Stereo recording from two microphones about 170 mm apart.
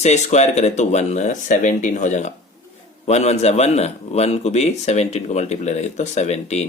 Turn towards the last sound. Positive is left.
turn(degrees=40)  # may be behind; listen again after turning